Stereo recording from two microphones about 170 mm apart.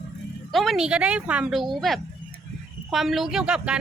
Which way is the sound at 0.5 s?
Centre (ahead or behind).